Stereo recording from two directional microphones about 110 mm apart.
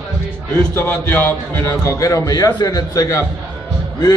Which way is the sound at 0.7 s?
15° left (ahead or behind).